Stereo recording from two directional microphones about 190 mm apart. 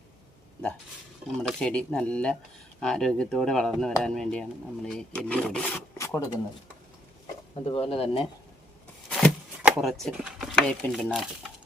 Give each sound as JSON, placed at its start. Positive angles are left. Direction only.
{"t": 1.4, "sound": "speech", "side_deg": 5}
{"t": 7.5, "sound": "speech", "side_deg": 30}
{"t": 9.0, "sound": "a sound", "side_deg": 5}
{"t": 9.6, "sound": "speech", "side_deg": -5}